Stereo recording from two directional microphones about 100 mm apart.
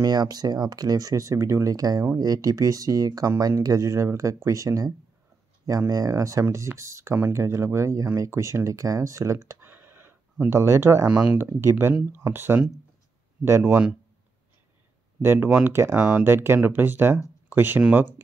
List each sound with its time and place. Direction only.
0.0 s speech: 40° right (ahead or behind)
11.1 s speech: 10° right (ahead or behind)
12.2 s speech: 20° right (ahead or behind)
15.2 s speech: 20° right (ahead or behind)
16.0 s speech: 10° right (ahead or behind)
16.3 s speech: 20° right (ahead or behind)